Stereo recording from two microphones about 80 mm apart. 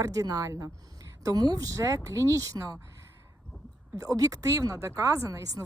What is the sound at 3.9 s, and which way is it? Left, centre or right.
Speech, right.